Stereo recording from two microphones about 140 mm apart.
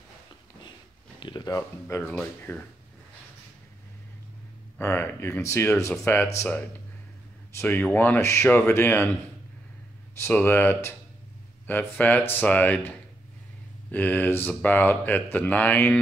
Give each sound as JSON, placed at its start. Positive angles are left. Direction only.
{"t": 1.2, "sound": "speech", "side_deg": 30}
{"t": 2.0, "sound": "speech", "side_deg": 10}
{"t": 4.7, "sound": "speech", "side_deg": 15}
{"t": 7.5, "sound": "speech", "side_deg": 10}
{"t": 10.1, "sound": "speech", "side_deg": 15}
{"t": 13.9, "sound": "speech", "side_deg": 15}